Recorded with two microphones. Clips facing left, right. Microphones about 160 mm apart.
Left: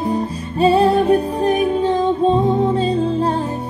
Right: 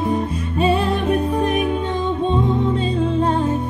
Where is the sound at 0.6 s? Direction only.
35° left (ahead or behind).